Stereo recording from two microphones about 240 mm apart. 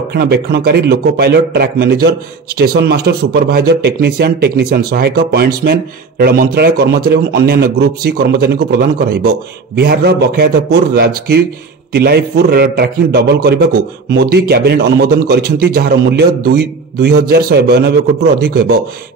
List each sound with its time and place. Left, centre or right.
0.1 s a man's voice: right